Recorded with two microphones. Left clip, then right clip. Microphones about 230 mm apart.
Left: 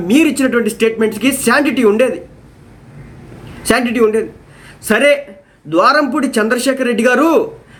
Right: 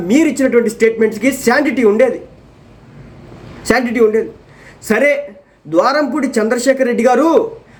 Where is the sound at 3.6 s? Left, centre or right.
Centre.